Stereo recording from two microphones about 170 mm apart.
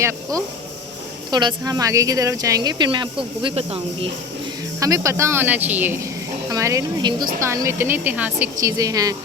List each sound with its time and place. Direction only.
0.0 s speech: 20° right (ahead or behind); by 4.1 s 35° right (ahead or behind)
4.8 s speech: 20° right (ahead or behind)
8.6 s speech: 20° right (ahead or behind)